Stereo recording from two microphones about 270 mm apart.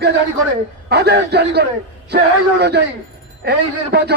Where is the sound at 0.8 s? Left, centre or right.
Right.